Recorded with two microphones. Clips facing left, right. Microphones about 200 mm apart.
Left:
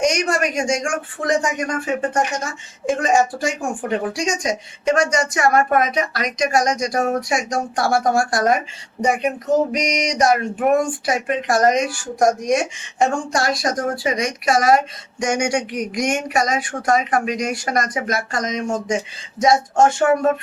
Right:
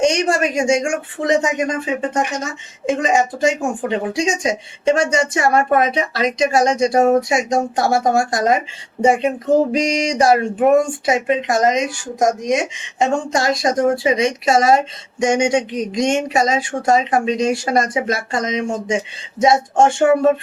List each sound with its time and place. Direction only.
0.0 s speech: 30° right (ahead or behind)